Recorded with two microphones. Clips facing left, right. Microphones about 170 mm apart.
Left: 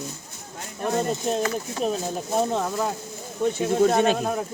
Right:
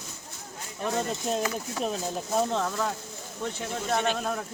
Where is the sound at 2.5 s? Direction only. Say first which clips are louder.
Left 3 dB; 15° left (ahead or behind).